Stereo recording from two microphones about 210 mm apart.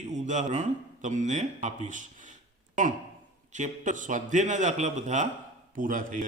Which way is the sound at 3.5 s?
35° right (ahead or behind).